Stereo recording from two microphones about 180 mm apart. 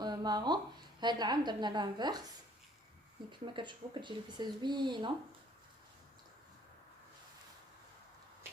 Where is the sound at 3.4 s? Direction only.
25° right (ahead or behind).